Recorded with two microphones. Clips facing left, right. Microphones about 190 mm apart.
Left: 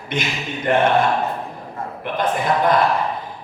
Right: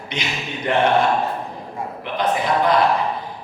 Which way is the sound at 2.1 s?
50° left (ahead or behind).